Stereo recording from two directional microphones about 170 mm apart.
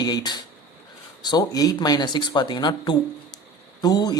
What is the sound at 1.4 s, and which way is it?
Speech, 20° left (ahead or behind).